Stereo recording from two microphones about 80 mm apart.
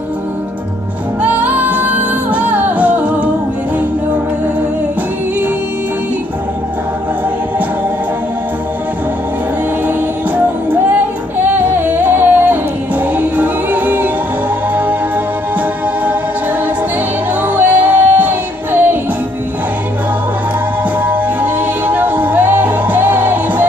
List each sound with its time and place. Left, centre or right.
1.2 s music: right
10.3 s music: right
17.4 s music: right
21.0 s music: right